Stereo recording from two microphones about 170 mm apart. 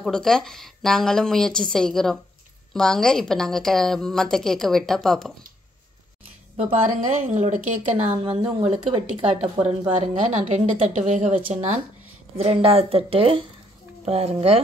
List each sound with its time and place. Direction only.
0.0 s a woman's voice: centre (ahead or behind)
6.9 s speech: 45° right (ahead or behind)